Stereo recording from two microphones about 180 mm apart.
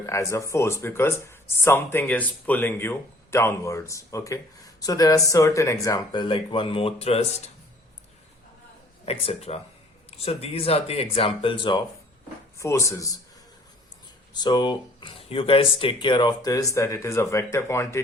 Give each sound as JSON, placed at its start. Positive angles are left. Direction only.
{"t": 0.0, "sound": "speech", "side_deg": 15}
{"t": 9.0, "sound": "speech", "side_deg": 35}
{"t": 12.5, "sound": "speech", "side_deg": 15}
{"t": 14.3, "sound": "speech", "side_deg": 25}